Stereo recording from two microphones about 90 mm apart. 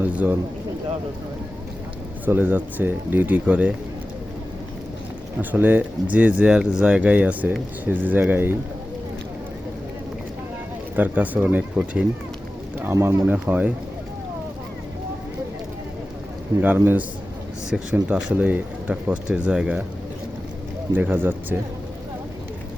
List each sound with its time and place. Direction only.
0.0 s a man's voice: 20° right (ahead or behind)
2.2 s speech: 20° right (ahead or behind)
5.4 s speech: 20° right (ahead or behind)
10.9 s speech: 15° right (ahead or behind)
12.9 s speech: 30° right (ahead or behind)
13.2 s speech: 15° right (ahead or behind)
16.6 s speech: 15° right (ahead or behind)
17.7 s speech: 10° right (ahead or behind)
20.9 s speech: 25° right (ahead or behind)